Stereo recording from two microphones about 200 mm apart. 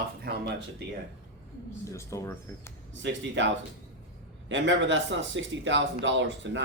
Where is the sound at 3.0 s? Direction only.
65° right (ahead or behind).